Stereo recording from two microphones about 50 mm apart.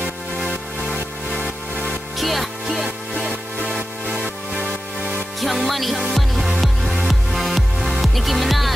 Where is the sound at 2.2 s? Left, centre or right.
Centre.